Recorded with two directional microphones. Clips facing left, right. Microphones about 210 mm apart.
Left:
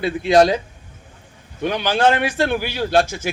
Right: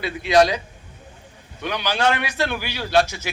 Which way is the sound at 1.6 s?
50° left (ahead or behind).